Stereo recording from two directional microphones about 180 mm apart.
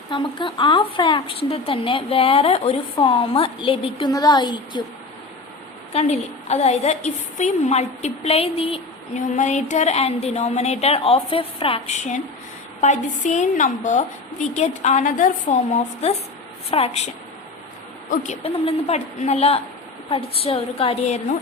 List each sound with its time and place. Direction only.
0.1 s a woman's voice: 25° left (ahead or behind)
5.9 s a woman's voice: 35° left (ahead or behind)
18.1 s a woman's voice: 40° left (ahead or behind)